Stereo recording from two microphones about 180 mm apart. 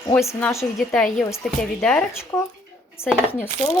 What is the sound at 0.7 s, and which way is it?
A woman's voice, 5° left (ahead or behind).